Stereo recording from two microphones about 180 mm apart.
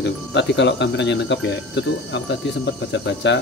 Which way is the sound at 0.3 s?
75° left (ahead or behind).